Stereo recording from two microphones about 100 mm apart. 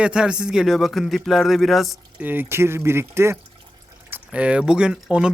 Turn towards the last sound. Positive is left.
turn(degrees=-10)  # may be behind; listen again after turning